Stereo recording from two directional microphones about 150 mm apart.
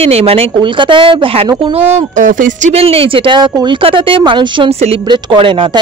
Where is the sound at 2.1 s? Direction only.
60° right (ahead or behind).